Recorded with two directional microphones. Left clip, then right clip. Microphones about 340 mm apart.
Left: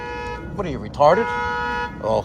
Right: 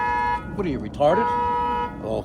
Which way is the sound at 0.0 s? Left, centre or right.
Centre.